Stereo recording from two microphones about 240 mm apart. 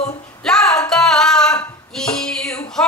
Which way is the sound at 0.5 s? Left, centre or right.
Centre.